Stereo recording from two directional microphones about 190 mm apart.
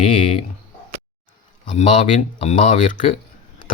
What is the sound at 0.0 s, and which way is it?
Speech, 30° left (ahead or behind).